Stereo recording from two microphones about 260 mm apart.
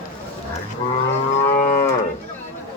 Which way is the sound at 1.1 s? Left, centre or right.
Left.